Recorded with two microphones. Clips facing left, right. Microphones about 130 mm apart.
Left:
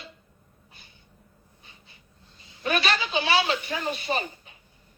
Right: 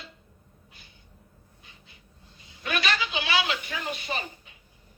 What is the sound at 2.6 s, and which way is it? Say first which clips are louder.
A woman's voice: left 3 dB; 35° left (ahead or behind).